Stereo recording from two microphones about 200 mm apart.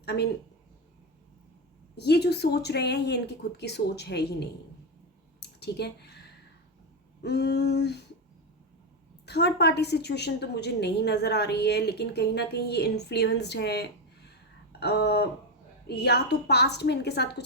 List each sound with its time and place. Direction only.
0.0 s a woman's voice: 55° left (ahead or behind)
2.0 s a woman's voice: 55° left (ahead or behind)
5.4 s a sound: 55° left (ahead or behind)
7.2 s a woman's voice: 55° left (ahead or behind)
9.2 s a woman's voice: 55° left (ahead or behind)